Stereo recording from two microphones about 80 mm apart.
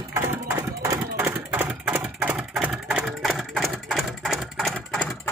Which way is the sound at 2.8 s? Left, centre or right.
Centre.